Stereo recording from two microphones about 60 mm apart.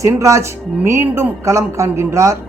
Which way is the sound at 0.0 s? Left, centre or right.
Right.